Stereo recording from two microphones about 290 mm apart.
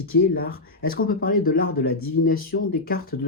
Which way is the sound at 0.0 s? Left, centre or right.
Left.